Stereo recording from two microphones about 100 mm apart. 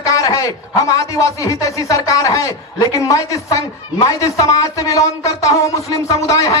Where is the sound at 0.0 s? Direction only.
35° left (ahead or behind).